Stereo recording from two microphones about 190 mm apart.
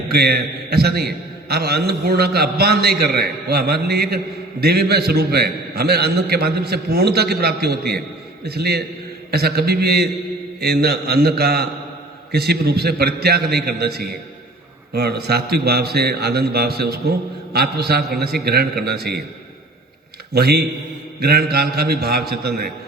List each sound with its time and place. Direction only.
0.1 s a man's voice: 55° right (ahead or behind)
20.3 s a man's voice: 55° right (ahead or behind)